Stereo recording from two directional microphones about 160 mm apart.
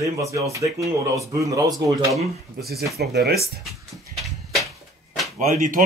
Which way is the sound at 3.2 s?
75° right (ahead or behind).